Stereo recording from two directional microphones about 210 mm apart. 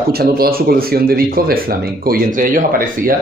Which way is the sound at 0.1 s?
45° right (ahead or behind).